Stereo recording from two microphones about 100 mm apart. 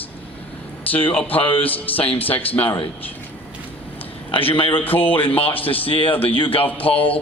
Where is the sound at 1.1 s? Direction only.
15° left (ahead or behind).